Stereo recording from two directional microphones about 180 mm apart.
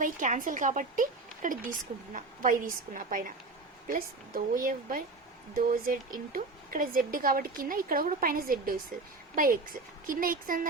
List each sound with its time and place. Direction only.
0.0 s a woman's voice: 45° right (ahead or behind)